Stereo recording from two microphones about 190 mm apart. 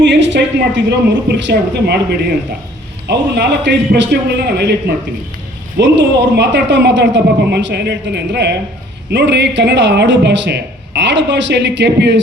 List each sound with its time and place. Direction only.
0.0 s a sound: 70° right (ahead or behind)
0.9 s a man's voice: 65° right (ahead or behind)
5.8 s a man's voice: 70° right (ahead or behind)